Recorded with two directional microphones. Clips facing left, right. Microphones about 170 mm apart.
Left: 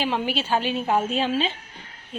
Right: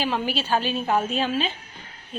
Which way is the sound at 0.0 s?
20° left (ahead or behind).